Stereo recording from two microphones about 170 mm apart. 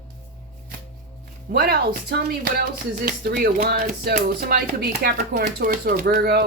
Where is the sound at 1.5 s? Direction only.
65° right (ahead or behind).